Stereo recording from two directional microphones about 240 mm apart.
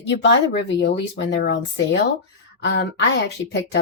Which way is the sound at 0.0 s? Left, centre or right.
Left.